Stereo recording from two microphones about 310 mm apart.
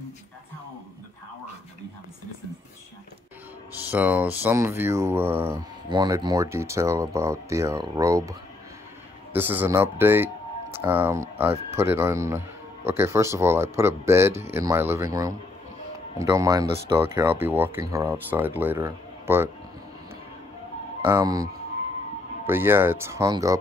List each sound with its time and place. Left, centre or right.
3.9 s speech: centre
16.6 s speech: right
16.9 s speech: centre
21.0 s speech: centre
22.5 s speech: centre